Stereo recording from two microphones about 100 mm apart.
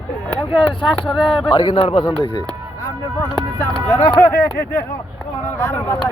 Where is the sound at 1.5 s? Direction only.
50° left (ahead or behind).